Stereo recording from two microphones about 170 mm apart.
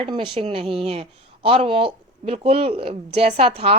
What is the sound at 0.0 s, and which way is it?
A woman's voice, 30° right (ahead or behind).